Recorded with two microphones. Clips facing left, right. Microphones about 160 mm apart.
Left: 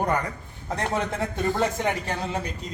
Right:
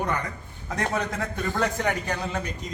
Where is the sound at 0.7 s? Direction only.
25° left (ahead or behind).